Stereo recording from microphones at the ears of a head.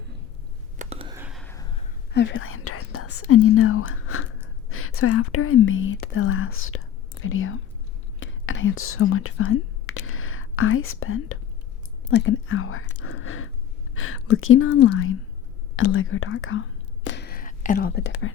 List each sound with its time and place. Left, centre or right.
1.6 s whispering: left
13.9 s speech: left
15.7 s whispering: left